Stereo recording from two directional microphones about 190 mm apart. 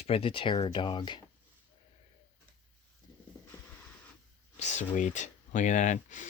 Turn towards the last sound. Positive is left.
turn(degrees=40)  # may be behind; listen again after turning